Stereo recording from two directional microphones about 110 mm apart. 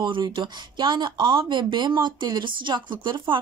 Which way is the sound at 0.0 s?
45° right (ahead or behind).